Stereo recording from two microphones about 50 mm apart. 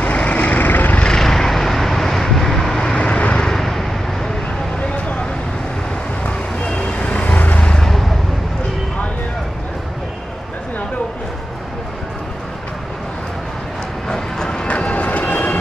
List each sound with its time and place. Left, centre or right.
0.0 s vehicle: left
1.1 s vehicle: centre
3.0 s vehicle: left
3.4 s vehicle: centre
4.9 s vehicle: left
6.2 s vehicle: left
7.7 s a sound: centre
14.0 s run: centre
14.7 s vehicle: left